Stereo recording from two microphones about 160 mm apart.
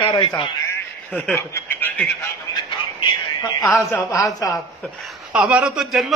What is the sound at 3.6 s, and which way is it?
A man's voice, 20° left (ahead or behind).